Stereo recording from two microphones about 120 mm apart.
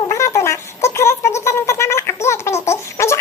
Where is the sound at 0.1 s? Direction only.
25° left (ahead or behind).